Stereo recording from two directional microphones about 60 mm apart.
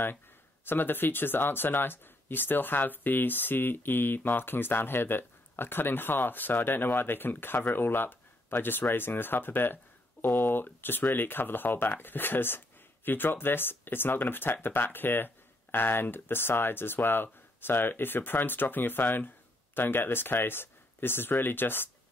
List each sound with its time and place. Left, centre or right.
0.7 s speech: left